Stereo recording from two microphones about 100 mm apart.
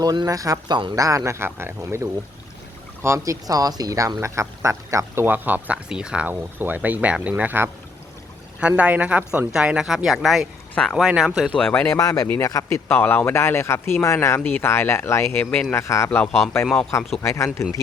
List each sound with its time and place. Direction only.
0.0 s speech: 45° right (ahead or behind); by 11.3 s 5° right (ahead or behind)
11.5 s speech: 10° left (ahead or behind)
11.9 s speech: 35° left (ahead or behind)